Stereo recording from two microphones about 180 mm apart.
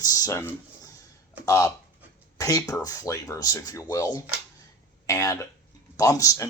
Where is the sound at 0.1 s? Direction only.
20° left (ahead or behind).